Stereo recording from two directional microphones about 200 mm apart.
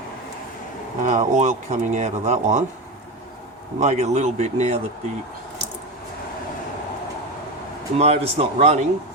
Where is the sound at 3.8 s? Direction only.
35° right (ahead or behind).